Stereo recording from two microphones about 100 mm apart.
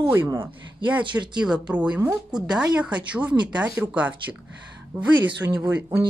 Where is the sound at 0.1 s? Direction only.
25° right (ahead or behind).